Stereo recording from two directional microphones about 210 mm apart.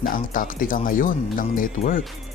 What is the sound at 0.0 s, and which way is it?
Speech, 40° left (ahead or behind).